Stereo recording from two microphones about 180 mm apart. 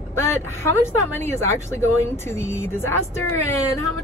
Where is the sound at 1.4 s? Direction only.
15° left (ahead or behind).